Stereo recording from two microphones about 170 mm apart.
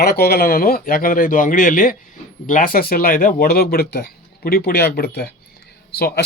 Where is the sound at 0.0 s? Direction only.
65° left (ahead or behind).